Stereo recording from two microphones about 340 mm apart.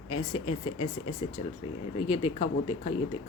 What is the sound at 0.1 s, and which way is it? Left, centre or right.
Speech, centre.